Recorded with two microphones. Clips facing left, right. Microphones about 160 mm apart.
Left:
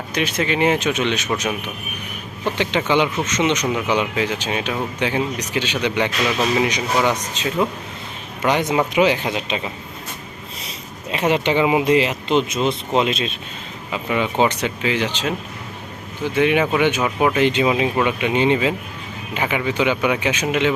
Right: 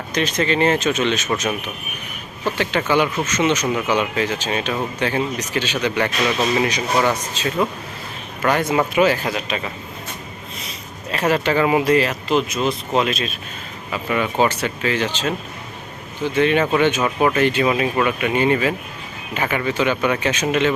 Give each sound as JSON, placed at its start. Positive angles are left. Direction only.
{"t": 0.1, "sound": "speech", "side_deg": 10}
{"t": 11.1, "sound": "speech", "side_deg": 20}